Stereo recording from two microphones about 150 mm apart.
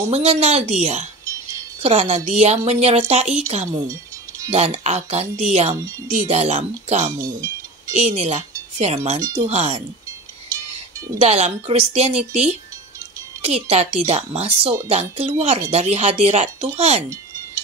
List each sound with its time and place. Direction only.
0.1 s speech: 45° right (ahead or behind)
11.1 s speech: 45° right (ahead or behind)